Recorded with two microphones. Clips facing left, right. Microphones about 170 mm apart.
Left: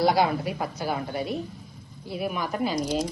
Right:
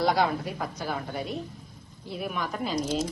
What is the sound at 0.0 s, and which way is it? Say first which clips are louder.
Speech: left 3 dB; 5° left (ahead or behind).